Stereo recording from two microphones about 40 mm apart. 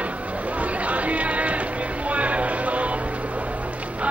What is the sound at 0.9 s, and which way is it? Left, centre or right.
Music, right.